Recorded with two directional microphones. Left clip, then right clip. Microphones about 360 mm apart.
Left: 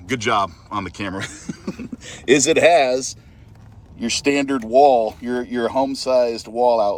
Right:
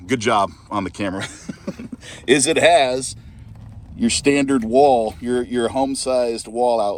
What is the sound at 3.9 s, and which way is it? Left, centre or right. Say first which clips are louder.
Speech: right 2 dB; centre.